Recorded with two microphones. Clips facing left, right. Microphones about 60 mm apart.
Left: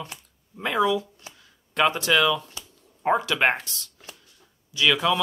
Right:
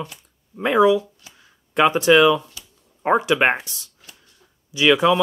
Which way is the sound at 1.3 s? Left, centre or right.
Right.